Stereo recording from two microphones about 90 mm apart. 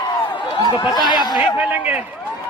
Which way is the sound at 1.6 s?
15° right (ahead or behind).